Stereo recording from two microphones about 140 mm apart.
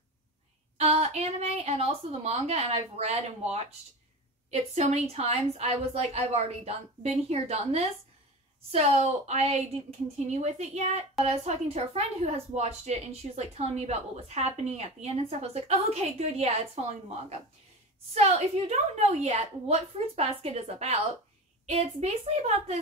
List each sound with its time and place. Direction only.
0.7 s a woman's voice: 50° right (ahead or behind)
18.1 s a woman's voice: 50° right (ahead or behind)